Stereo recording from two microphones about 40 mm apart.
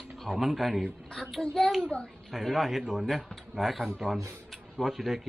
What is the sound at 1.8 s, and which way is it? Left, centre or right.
Speech, left.